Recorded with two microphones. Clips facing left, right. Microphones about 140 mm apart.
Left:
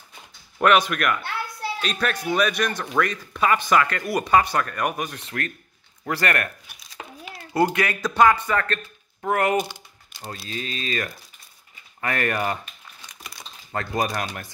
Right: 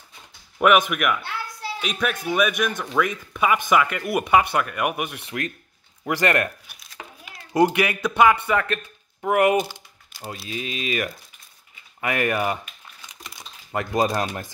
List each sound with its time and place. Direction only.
0.6 s speech: 10° right (ahead or behind)
7.5 s speech: 15° right (ahead or behind)
9.6 s typing: 5° right (ahead or behind)
10.5 s speech: 15° right (ahead or behind)
13.9 s speech: 25° right (ahead or behind)